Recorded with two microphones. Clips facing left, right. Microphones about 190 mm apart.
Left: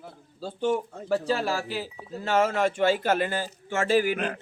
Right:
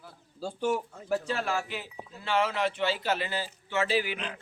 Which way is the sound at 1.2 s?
35° left (ahead or behind).